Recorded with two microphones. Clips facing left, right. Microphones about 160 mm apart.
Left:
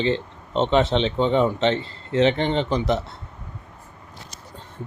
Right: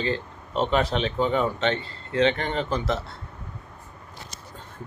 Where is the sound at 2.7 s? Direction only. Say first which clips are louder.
Left 4 dB; centre (ahead or behind).